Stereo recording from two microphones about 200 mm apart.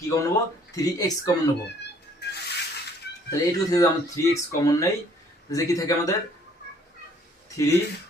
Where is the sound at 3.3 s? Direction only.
15° left (ahead or behind).